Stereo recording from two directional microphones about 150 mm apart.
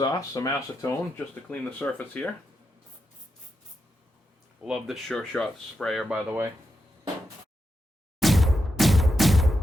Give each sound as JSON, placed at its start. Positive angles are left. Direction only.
{"t": 0.0, "sound": "speech", "side_deg": 25}
{"t": 1.5, "sound": "speech", "side_deg": 10}
{"t": 4.6, "sound": "speech", "side_deg": 0}
{"t": 8.2, "sound": "a sound", "side_deg": 0}